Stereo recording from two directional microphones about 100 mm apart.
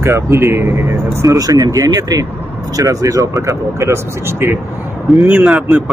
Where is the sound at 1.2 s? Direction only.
35° right (ahead or behind).